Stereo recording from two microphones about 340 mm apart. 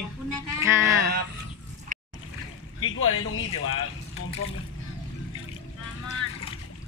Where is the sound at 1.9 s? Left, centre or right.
Right.